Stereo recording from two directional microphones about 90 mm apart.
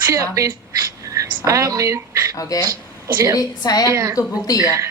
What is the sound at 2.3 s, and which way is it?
Speech, 40° left (ahead or behind).